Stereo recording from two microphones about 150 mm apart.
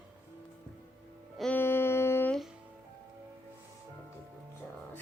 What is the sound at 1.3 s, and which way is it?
Music, 5° left (ahead or behind).